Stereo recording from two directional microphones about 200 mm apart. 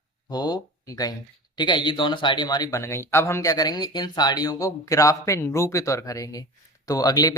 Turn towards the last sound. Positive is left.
turn(degrees=20)  # may be behind; listen again after turning